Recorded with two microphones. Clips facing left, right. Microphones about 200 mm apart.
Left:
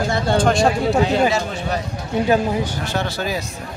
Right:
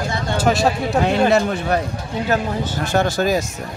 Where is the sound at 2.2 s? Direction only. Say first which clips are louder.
Left 3 dB; 15° left (ahead or behind).